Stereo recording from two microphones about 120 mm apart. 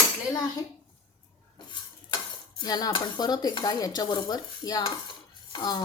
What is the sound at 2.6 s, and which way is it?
Speech, 35° left (ahead or behind).